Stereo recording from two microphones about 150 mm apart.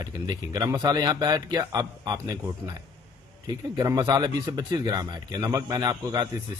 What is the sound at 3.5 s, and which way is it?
A man's voice, 25° right (ahead or behind).